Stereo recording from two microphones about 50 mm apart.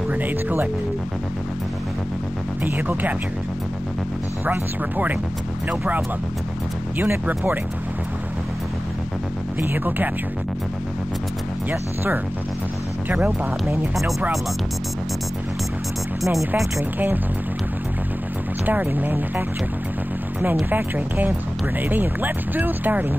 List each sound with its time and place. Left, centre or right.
0.1 s speech: right
2.6 s speech: right
4.5 s speech: right
9.6 s speech: right
11.7 s speech: right
13.1 s speech: right
16.7 s speech: right
18.7 s speech: right
20.7 s speech: right